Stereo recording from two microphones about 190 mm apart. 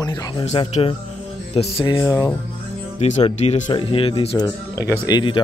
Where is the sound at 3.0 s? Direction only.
35° left (ahead or behind).